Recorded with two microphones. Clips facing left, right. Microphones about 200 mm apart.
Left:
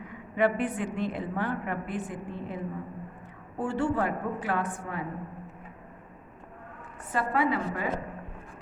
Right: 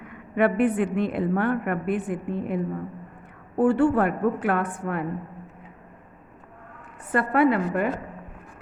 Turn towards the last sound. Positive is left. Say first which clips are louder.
# right 7 dB
turn(degrees=-60)  # may be behind; listen again after turning